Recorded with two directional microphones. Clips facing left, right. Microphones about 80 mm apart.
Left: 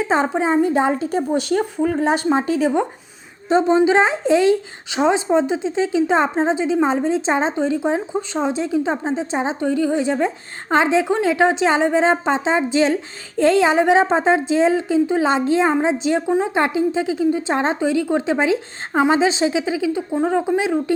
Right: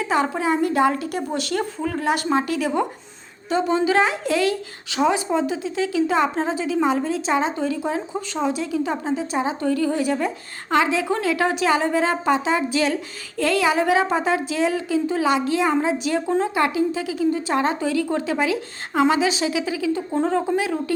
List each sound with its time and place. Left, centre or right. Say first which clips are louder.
0.0 s a woman's voice: left 3 dB; left
20.6 s a woman's voice: left 4 dB; left